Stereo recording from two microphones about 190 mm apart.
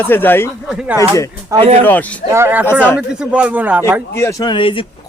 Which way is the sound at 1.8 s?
10° left (ahead or behind).